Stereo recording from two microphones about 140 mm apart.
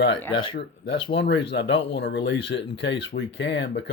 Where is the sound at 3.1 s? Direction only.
90° left.